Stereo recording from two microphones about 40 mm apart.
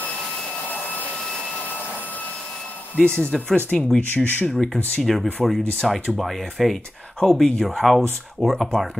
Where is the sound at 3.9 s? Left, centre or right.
Left.